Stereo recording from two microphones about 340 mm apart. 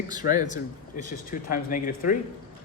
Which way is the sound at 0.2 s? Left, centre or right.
Left.